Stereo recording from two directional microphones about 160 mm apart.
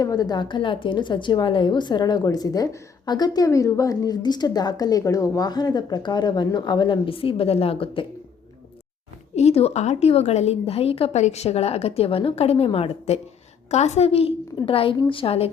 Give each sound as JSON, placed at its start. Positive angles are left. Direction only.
{"t": 0.0, "sound": "a woman's voice", "side_deg": 25}
{"t": 9.3, "sound": "a woman's voice", "side_deg": 40}